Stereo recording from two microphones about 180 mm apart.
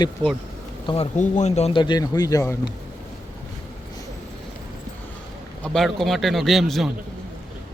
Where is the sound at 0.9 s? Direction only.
40° left (ahead or behind).